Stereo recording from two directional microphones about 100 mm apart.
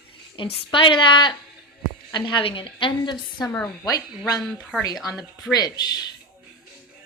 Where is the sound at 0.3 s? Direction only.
60° left (ahead or behind).